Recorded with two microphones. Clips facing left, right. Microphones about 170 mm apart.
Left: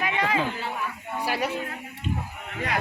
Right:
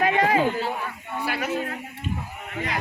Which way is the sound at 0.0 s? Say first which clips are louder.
Right 5 dB; 45° right (ahead or behind).